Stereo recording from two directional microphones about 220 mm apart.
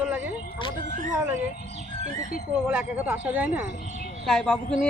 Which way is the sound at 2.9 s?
5° right (ahead or behind).